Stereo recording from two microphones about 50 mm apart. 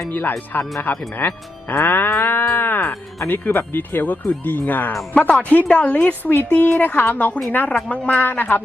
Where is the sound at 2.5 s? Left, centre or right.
Left.